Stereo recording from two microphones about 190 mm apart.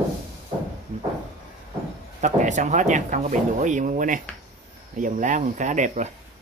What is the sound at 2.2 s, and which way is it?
Speech, 40° right (ahead or behind).